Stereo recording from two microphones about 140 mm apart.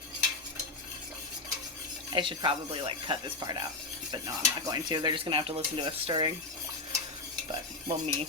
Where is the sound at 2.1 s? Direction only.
35° right (ahead or behind).